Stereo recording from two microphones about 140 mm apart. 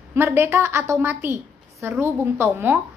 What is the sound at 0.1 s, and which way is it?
A woman's voice, 15° right (ahead or behind).